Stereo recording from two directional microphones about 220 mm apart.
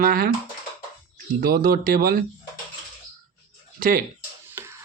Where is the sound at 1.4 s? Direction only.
40° right (ahead or behind).